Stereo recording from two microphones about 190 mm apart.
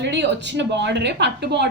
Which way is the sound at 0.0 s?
65° right (ahead or behind).